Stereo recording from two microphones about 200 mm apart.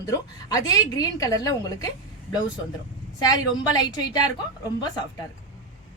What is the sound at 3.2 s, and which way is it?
A woman's voice, 20° left (ahead or behind).